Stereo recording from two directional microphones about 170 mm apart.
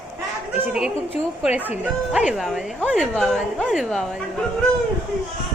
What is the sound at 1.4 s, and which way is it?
A woman's voice, 10° right (ahead or behind).